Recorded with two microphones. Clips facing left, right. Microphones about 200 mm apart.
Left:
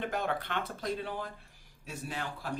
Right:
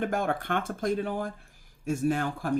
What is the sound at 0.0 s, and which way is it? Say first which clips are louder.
Speech: right 5 dB; 50° right (ahead or behind).